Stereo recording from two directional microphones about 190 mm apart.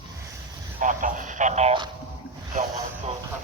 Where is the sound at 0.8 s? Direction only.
45° right (ahead or behind).